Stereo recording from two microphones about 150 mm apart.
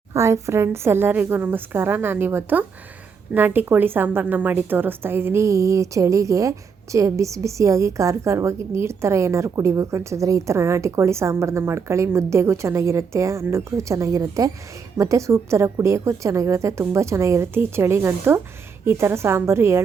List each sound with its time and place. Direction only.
0.1 s a woman's voice: 20° right (ahead or behind)